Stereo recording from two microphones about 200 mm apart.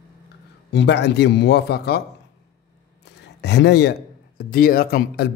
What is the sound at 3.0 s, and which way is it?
Speech, 55° left (ahead or behind).